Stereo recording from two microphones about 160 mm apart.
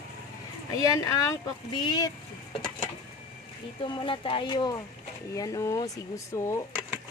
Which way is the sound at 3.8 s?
30° left (ahead or behind).